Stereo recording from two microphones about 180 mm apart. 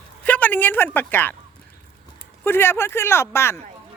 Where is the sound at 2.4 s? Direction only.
10° left (ahead or behind).